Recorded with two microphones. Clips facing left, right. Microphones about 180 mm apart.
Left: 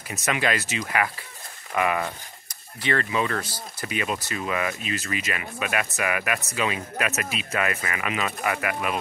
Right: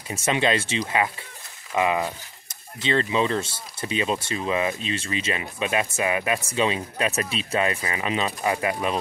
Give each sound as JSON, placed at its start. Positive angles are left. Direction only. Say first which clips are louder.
{"t": 0.1, "sound": "speech", "louder": "right 3 dB", "side_deg": -25}